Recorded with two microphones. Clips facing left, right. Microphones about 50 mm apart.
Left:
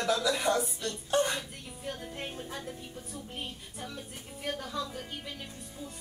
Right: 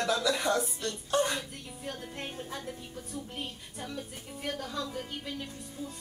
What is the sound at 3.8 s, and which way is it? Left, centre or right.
Speech, centre.